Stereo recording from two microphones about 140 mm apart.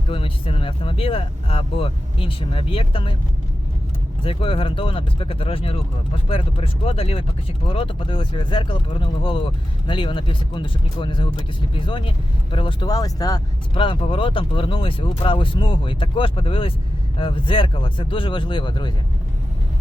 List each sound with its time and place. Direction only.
0.1 s speech: 40° left (ahead or behind)
4.2 s speech: 40° left (ahead or behind)